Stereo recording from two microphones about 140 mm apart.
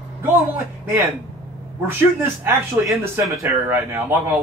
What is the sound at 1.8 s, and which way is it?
A man's voice, 15° right (ahead or behind).